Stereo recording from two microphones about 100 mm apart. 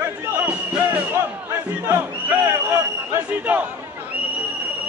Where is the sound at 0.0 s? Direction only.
20° right (ahead or behind).